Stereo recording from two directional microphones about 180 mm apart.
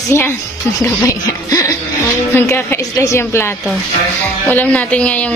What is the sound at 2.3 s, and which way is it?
Speech, 15° left (ahead or behind).